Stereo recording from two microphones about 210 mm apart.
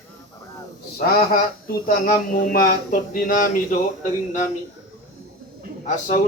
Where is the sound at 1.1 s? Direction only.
45° left (ahead or behind).